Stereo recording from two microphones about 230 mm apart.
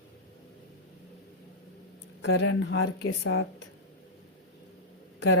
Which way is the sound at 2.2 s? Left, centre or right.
Left.